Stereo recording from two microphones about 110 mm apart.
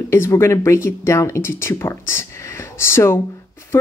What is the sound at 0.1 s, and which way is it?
Speech, 25° left (ahead or behind).